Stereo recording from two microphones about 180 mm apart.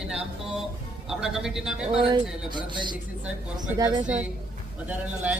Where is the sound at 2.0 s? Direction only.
25° right (ahead or behind).